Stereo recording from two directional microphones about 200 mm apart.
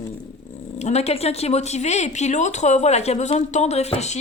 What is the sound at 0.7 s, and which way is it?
Speech, 35° left (ahead or behind).